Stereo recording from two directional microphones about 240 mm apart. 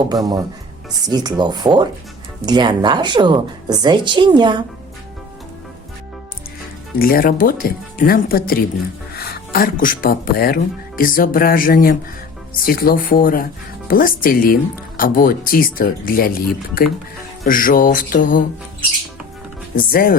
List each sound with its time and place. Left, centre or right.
0.1 s a woman's voice: centre
7.0 s speech: left
17.4 s speech: left
19.7 s speech: left